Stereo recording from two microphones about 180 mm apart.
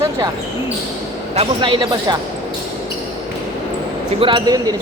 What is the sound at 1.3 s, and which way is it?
Speech, 30° right (ahead or behind).